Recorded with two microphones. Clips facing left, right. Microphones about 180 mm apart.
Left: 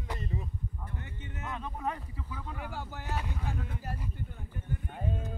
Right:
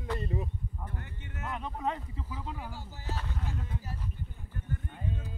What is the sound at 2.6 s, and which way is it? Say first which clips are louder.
Speech: left 2 dB; 60° left (ahead or behind).